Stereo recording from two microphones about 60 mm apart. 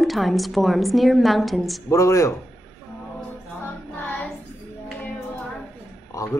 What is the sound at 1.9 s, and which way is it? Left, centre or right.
Speech, left.